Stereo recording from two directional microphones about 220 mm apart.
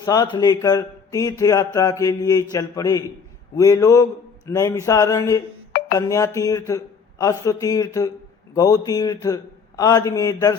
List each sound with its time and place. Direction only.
0.0 s a man's voice: 20° left (ahead or behind)